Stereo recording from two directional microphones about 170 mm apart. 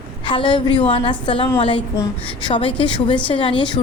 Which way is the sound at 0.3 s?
30° left (ahead or behind).